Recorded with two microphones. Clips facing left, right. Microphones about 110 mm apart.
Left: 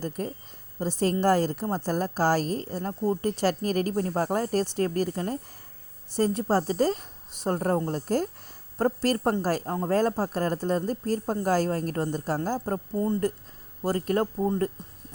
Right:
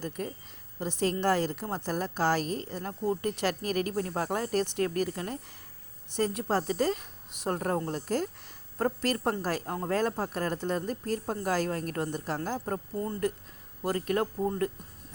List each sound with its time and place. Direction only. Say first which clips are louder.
0.2 s a woman's voice: left 3 dB; 35° left (ahead or behind)